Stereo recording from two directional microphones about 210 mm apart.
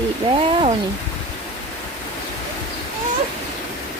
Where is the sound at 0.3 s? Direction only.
25° right (ahead or behind).